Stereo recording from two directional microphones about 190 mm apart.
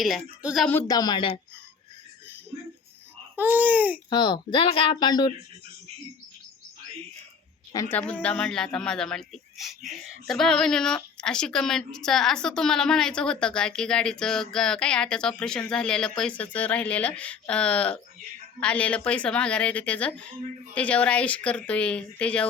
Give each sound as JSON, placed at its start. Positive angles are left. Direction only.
{"t": 0.0, "sound": "a man's voice", "side_deg": 0}
{"t": 0.7, "sound": "speech", "side_deg": 15}
{"t": 3.3, "sound": "speech", "side_deg": -10}
{"t": 4.1, "sound": "speech", "side_deg": 25}
{"t": 7.7, "sound": "a man's voice", "side_deg": 15}